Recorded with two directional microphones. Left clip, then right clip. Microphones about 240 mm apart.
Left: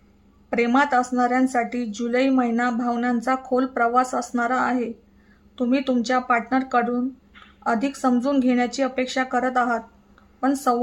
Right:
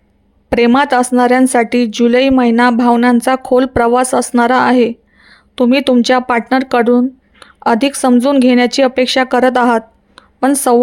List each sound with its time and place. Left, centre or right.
0.5 s speech: right